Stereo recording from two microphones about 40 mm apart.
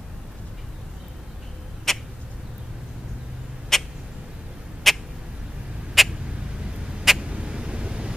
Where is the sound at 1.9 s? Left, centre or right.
Centre.